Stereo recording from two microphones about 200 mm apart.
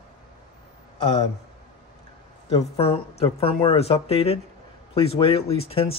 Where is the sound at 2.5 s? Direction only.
30° left (ahead or behind).